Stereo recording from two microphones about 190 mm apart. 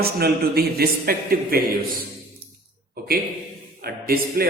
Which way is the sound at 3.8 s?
50° right (ahead or behind).